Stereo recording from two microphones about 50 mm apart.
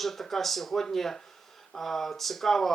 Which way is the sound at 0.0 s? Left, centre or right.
Centre.